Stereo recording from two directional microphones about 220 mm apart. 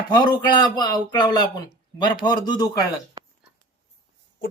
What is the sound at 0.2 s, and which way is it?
Speech, 20° left (ahead or behind).